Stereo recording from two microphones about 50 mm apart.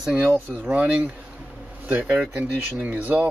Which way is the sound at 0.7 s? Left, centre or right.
Right.